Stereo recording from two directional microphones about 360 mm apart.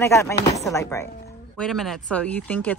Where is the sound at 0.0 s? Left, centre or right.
Centre.